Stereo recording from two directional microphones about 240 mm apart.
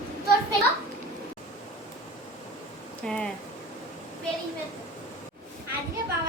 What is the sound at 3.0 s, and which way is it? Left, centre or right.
Speech, centre.